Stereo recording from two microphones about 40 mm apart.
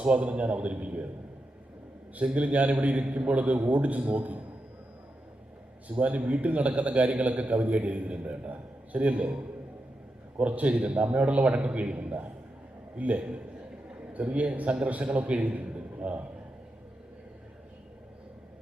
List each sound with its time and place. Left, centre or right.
0.0 s a man's voice: right
2.2 s a man's voice: right
5.9 s a man's voice: right
10.3 s a man's voice: right